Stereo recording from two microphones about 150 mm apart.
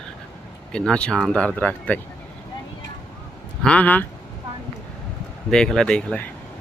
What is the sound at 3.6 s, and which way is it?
Speech, 10° left (ahead or behind).